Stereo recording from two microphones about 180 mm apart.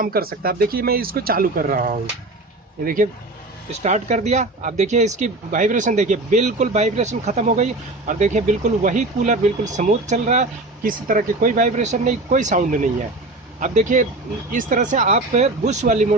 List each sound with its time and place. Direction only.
0.0 s speech: 55° right (ahead or behind)